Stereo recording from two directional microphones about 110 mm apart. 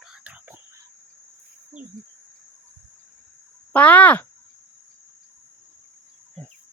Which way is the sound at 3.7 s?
15° left (ahead or behind).